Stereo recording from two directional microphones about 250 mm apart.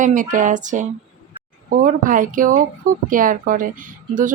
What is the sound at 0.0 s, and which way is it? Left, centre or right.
Speech, right.